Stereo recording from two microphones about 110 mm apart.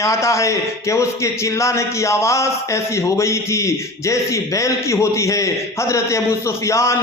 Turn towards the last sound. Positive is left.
turn(degrees=25)  # may be behind; listen again after turning